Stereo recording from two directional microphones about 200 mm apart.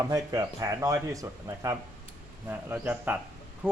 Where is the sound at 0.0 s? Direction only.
15° right (ahead or behind).